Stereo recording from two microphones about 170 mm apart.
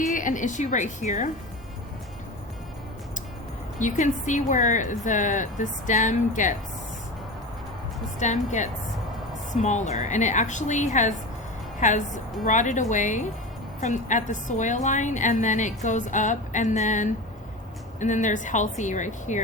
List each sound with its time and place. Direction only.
0.1 s a woman's voice: 50° left (ahead or behind)
3.8 s a woman's voice: 45° left (ahead or behind)
8.2 s a woman's voice: 45° left (ahead or behind)